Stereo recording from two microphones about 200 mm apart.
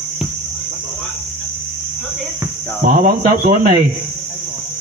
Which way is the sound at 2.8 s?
45° right (ahead or behind).